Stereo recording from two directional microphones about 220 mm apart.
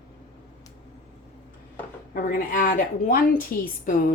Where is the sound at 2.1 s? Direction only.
40° left (ahead or behind).